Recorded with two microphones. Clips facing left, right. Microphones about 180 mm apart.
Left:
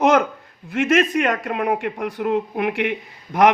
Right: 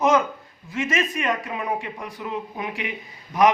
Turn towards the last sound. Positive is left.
turn(degrees=70)  # may be behind; listen again after turning